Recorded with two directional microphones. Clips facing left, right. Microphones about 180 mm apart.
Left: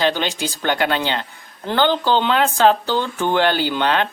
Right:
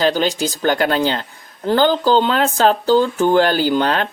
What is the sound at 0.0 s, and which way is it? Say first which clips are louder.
Speech: right 3 dB; 40° right (ahead or behind).